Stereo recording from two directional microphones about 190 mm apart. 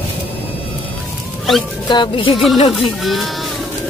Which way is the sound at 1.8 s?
25° left (ahead or behind).